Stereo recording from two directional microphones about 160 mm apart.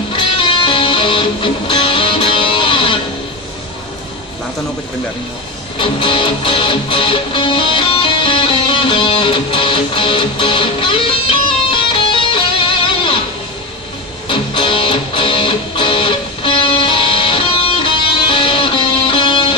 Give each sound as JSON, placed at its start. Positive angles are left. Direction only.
{"t": 0.1, "sound": "music", "side_deg": 30}
{"t": 5.8, "sound": "music", "side_deg": 30}
{"t": 14.3, "sound": "music", "side_deg": 30}